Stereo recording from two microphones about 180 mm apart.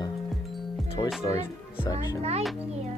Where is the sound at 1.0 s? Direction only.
25° left (ahead or behind).